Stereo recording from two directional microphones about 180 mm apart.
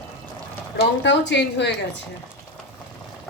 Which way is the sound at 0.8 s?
75° left (ahead or behind).